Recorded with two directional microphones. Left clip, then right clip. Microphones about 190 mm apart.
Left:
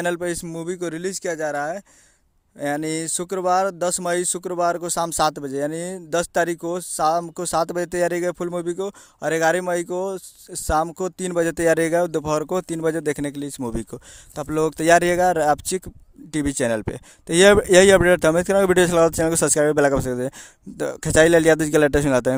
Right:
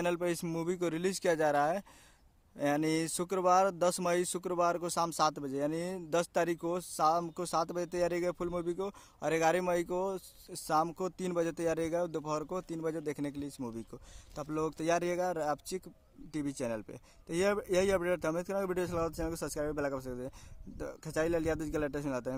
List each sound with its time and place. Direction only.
0.0 s speech: 30° left (ahead or behind); by 22.4 s 50° left (ahead or behind)